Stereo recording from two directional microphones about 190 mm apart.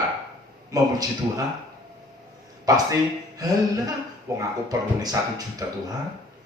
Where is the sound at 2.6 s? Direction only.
20° right (ahead or behind).